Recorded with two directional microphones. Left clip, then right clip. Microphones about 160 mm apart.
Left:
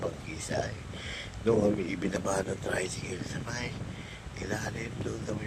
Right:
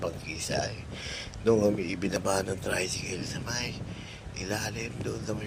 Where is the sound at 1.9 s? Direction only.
25° right (ahead or behind).